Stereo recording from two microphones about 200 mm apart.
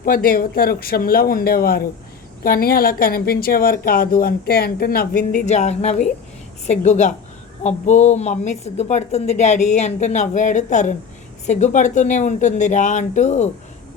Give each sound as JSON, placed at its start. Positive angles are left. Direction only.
{"t": 0.0, "sound": "a woman's voice", "side_deg": 45}